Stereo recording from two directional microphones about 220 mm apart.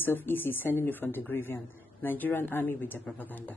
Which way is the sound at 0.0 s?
10° left (ahead or behind).